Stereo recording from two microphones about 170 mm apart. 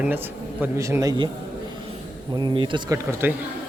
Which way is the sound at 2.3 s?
25° right (ahead or behind).